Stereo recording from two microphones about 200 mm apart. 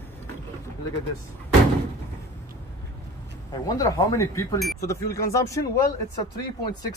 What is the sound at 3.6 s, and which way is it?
Speech, 15° left (ahead or behind).